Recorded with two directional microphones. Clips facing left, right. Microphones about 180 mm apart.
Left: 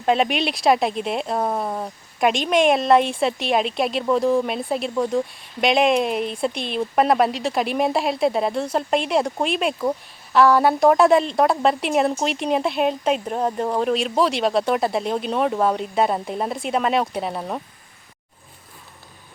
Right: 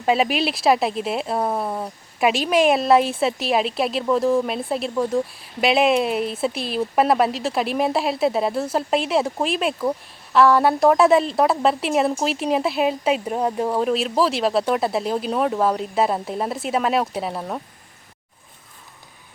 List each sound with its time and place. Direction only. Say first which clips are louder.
0.0 s speech: even; 5° right (ahead or behind)